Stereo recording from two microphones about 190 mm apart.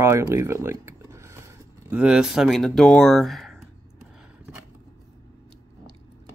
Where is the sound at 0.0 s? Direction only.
15° right (ahead or behind).